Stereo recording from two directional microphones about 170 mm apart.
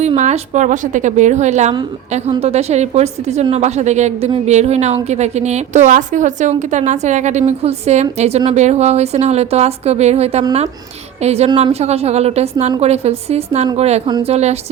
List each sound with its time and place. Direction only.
0.0 s a woman's voice: 40° right (ahead or behind)